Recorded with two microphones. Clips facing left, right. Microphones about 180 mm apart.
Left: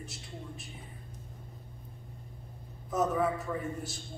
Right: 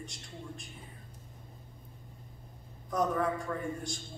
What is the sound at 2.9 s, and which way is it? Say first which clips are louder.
A man's voice: left 1 dB; 5° left (ahead or behind).